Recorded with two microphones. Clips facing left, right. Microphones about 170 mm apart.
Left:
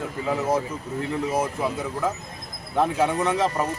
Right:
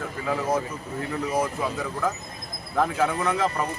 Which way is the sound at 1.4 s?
25° left (ahead or behind).